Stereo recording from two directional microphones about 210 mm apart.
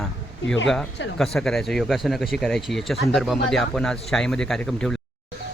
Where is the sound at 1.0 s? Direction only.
60° left (ahead or behind).